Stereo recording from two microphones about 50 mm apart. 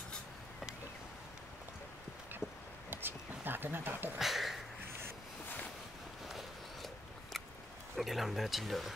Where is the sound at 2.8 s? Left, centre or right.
Right.